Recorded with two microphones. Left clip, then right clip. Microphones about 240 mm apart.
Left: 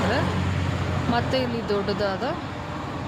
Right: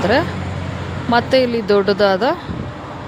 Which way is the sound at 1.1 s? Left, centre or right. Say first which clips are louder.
Right 12 dB; right.